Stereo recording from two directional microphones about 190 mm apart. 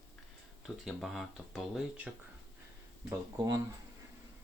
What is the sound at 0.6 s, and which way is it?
Speech, centre (ahead or behind).